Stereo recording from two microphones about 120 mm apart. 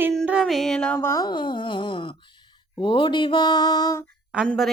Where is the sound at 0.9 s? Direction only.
25° left (ahead or behind).